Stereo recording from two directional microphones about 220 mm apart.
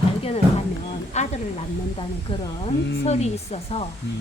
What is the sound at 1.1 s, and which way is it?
Speech, 30° left (ahead or behind).